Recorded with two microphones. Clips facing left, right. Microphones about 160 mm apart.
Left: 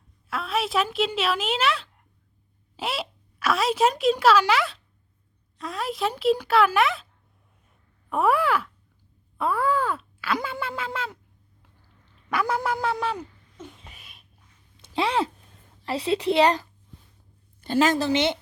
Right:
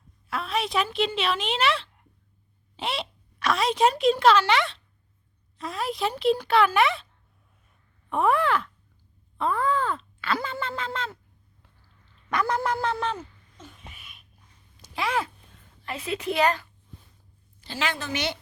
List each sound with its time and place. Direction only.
0.3 s a woman's voice: centre (ahead or behind)
8.1 s speech: 5° left (ahead or behind)
9.4 s groan: 10° left (ahead or behind)
12.3 s speech: 5° left (ahead or behind)
13.9 s a sound: 35° left (ahead or behind)
14.9 s a child's voice: 30° left (ahead or behind)
17.6 s a woman's voice: 50° left (ahead or behind)
18.1 s speech: 25° left (ahead or behind)